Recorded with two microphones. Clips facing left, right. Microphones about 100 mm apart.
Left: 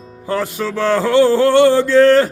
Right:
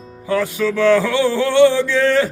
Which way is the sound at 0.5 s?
35° left (ahead or behind).